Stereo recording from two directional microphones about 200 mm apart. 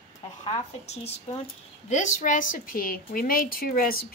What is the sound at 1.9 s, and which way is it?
A woman's voice, 40° left (ahead or behind).